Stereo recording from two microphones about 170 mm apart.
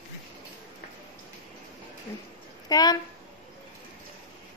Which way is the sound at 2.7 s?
25° left (ahead or behind).